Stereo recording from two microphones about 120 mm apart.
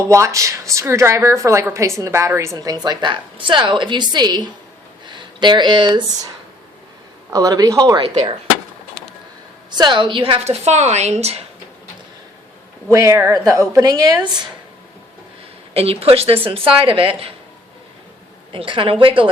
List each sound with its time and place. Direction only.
0.1 s a woman's voice: 25° right (ahead or behind)
5.0 s a sound: 40° right (ahead or behind)
7.3 s speech: 30° right (ahead or behind)
9.6 s a woman's voice: 35° right (ahead or behind)
10.4 s a woman's voice: 65° right (ahead or behind)
12.9 s a woman's voice: 25° right (ahead or behind)
15.7 s a woman's voice: 55° right (ahead or behind)
18.5 s a woman's voice: 45° right (ahead or behind)